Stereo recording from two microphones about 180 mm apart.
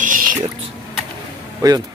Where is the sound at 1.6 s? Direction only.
20° right (ahead or behind).